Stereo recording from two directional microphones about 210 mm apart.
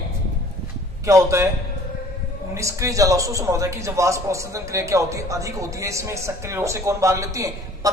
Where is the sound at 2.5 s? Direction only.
15° right (ahead or behind).